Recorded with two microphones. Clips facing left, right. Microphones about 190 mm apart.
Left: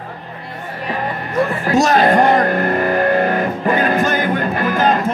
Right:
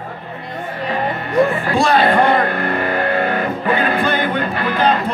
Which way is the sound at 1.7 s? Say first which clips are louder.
Left 2 dB; 45° left (ahead or behind).